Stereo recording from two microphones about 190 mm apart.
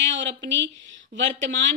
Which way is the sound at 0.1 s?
65° right (ahead or behind).